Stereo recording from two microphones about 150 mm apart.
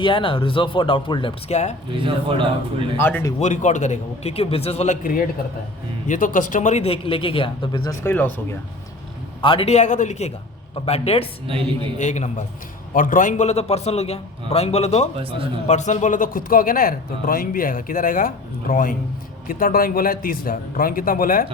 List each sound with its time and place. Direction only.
0.0 s speech: 35° left (ahead or behind)
1.5 s a man's voice: 50° left (ahead or behind)
1.9 s a man's voice: 35° right (ahead or behind)
3.0 s speech: 15° left (ahead or behind)
3.4 s a man's voice: 55° left (ahead or behind)
6.1 s speech: 60° left (ahead or behind); by 7.9 s 30° left (ahead or behind)
8.0 s speech: 15° left (ahead or behind)
9.4 s a man's voice: 35° left (ahead or behind)
11.4 s a man's voice: 35° right (ahead or behind)
11.9 s a man's voice: 55° left (ahead or behind)
12.9 s a man's voice: 65° left (ahead or behind); by 15.1 s 45° left (ahead or behind)
15.1 s a man's voice: 35° right (ahead or behind)
15.6 s speech: 50° left (ahead or behind); by 21.4 s 70° left (ahead or behind)